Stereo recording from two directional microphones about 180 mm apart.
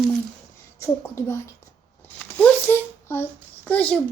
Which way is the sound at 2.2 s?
10° left (ahead or behind).